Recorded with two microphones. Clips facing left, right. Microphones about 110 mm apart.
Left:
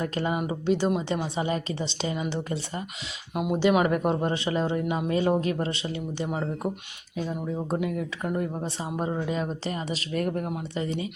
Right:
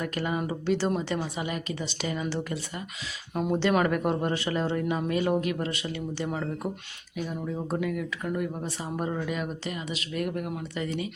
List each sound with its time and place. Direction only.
0.0 s speech: 25° left (ahead or behind)
1.1 s speech: 25° left (ahead or behind)
3.3 s speech: 10° left (ahead or behind); by 10.5 s 35° left (ahead or behind)
10.5 s speech: 25° left (ahead or behind)